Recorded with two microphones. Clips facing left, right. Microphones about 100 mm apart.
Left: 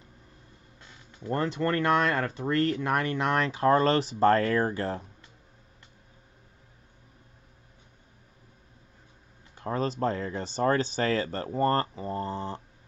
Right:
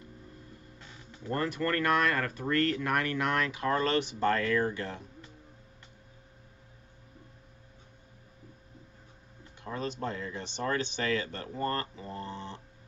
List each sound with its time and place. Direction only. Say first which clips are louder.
1.3 s speech: left 3 dB; 25° left (ahead or behind)
9.6 s speech: left 7 dB; 40° left (ahead or behind)